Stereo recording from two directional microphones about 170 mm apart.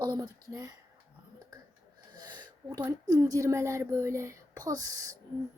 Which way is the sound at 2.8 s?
15° right (ahead or behind).